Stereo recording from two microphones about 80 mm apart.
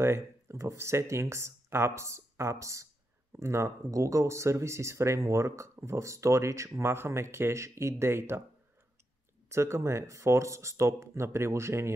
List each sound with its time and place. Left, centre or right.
0.0 s speech: right
9.5 s speech: right